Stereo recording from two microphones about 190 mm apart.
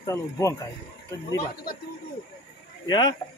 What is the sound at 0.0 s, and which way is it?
Speech, 15° left (ahead or behind).